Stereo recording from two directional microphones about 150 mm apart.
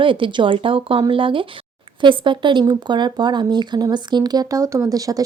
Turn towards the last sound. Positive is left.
turn(degrees=-25)  # may be behind; listen again after turning